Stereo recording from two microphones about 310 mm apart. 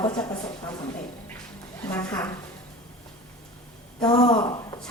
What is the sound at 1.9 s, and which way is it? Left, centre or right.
Speech, centre.